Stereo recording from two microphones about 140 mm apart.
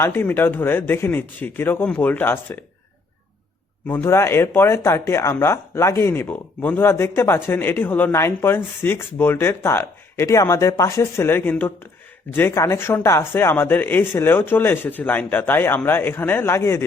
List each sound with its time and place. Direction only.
0.0 s speech: 15° left (ahead or behind)
3.8 s speech: 15° left (ahead or behind)